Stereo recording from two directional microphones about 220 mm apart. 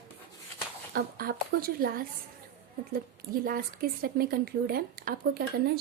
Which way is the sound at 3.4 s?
40° right (ahead or behind).